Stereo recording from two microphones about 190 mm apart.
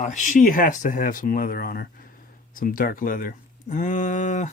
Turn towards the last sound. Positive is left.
turn(degrees=40)  # may be behind; listen again after turning